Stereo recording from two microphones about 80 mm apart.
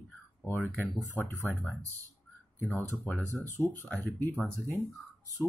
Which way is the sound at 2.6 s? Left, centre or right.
Left.